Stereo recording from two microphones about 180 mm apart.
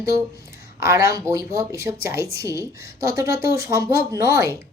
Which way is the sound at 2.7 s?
60° left (ahead or behind).